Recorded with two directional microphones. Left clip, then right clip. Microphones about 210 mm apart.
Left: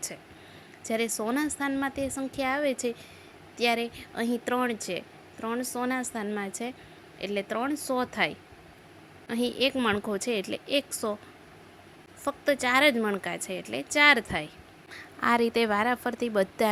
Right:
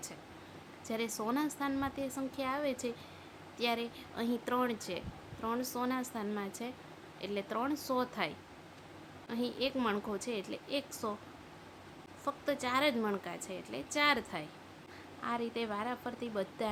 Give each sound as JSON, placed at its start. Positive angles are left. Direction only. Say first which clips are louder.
{"t": 0.9, "sound": "speech", "louder": "left 8 dB", "side_deg": 20}
{"t": 12.2, "sound": "speech", "louder": "left 9 dB", "side_deg": 25}
{"t": 15.2, "sound": "a woman's voice", "louder": "left 13 dB", "side_deg": 35}